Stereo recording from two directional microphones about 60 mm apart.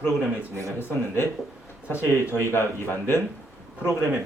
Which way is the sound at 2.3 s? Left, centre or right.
Left.